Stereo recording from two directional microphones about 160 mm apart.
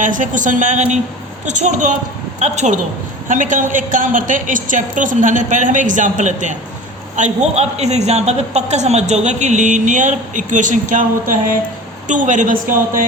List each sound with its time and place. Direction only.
0.0 s a woman's voice: 55° right (ahead or behind)